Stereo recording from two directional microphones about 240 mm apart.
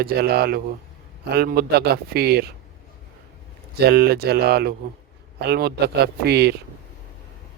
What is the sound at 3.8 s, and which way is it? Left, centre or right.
A man's voice, right.